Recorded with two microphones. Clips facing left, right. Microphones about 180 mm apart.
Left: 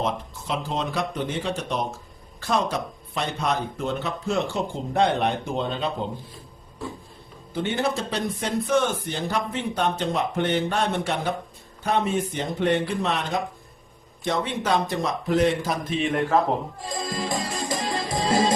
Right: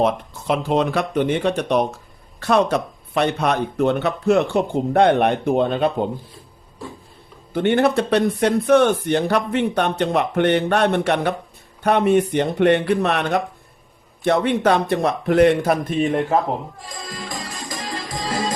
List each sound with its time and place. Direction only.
0.0 s speech: 60° right (ahead or behind)
7.5 s speech: 60° right (ahead or behind)
16.9 s music: 25° left (ahead or behind)